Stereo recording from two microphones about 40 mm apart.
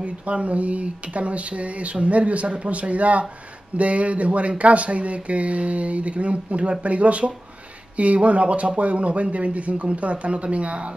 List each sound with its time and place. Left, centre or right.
0.0 s speech: right